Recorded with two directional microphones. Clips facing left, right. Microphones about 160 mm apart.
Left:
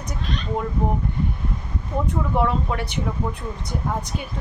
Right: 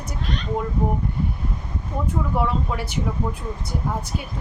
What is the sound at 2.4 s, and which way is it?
A woman's voice, 5° right (ahead or behind).